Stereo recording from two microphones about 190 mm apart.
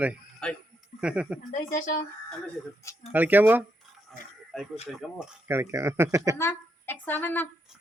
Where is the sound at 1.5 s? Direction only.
40° left (ahead or behind).